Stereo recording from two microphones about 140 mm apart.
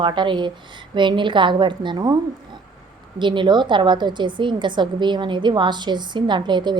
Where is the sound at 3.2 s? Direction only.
35° right (ahead or behind).